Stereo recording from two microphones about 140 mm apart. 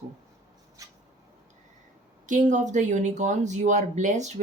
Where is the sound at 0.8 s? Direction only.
25° right (ahead or behind).